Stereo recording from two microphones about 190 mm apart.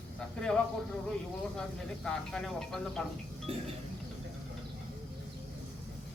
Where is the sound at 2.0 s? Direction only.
5° left (ahead or behind).